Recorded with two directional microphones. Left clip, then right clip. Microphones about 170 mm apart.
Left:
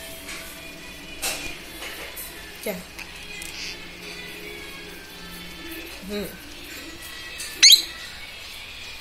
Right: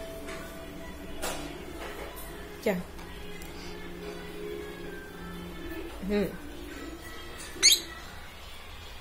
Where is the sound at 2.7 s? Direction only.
15° right (ahead or behind).